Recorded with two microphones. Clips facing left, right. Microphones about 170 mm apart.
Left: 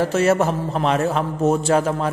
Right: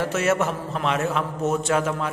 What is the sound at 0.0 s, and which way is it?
A man's voice, 35° left (ahead or behind).